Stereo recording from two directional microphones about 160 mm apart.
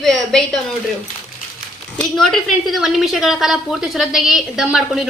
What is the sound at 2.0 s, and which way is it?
A woman's voice, 5° left (ahead or behind).